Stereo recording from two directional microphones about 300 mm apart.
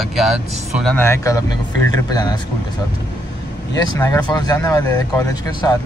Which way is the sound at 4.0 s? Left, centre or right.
Centre.